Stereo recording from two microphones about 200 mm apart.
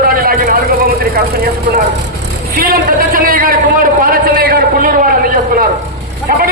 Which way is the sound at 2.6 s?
45° right (ahead or behind).